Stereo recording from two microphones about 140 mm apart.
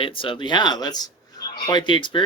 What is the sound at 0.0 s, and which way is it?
Speech, 40° left (ahead or behind).